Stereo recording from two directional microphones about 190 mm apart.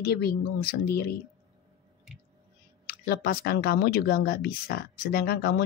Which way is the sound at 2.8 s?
50° left (ahead or behind).